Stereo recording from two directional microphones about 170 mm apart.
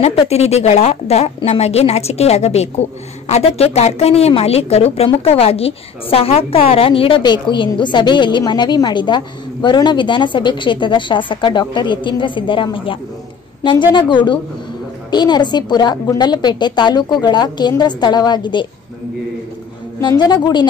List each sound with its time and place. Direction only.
0.0 s a woman's voice: 35° left (ahead or behind)
20.0 s a woman's voice: 25° left (ahead or behind)